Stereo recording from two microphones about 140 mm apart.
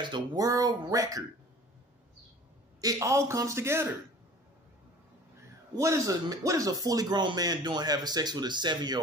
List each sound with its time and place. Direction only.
0.0 s speech: 30° right (ahead or behind)
2.8 s speech: 25° right (ahead or behind)
5.8 s speech: 20° right (ahead or behind)